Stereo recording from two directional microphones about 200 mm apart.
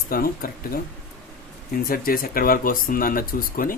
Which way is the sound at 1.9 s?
45° left (ahead or behind).